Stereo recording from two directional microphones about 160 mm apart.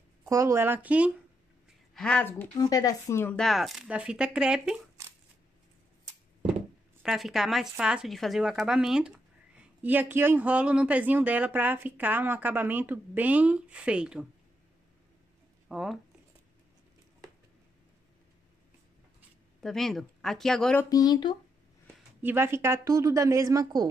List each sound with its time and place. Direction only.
0.2 s speech: 20° right (ahead or behind)
2.0 s speech: 5° left (ahead or behind)
2.5 s speech: 25° left (ahead or behind)
3.3 s speech: centre (ahead or behind)
7.0 s speech: centre (ahead or behind)
15.7 s speech: centre (ahead or behind)
19.6 s speech: centre (ahead or behind)
20.9 s speech: 25° left (ahead or behind)
22.2 s speech: 15° right (ahead or behind)